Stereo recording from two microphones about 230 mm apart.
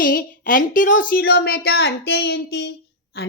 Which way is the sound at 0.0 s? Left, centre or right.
Left.